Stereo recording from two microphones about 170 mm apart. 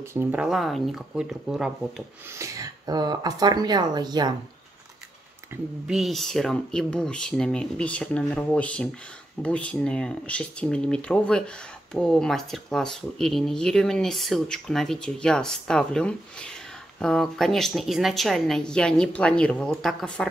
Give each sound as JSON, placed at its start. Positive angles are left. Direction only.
{"t": 0.1, "sound": "speech", "side_deg": -10}
{"t": 2.3, "sound": "speech", "side_deg": -20}
{"t": 5.5, "sound": "speech", "side_deg": -10}
{"t": 5.9, "sound": "speech", "side_deg": 0}